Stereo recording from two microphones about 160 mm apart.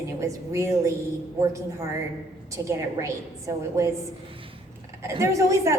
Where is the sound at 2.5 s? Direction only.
20° right (ahead or behind).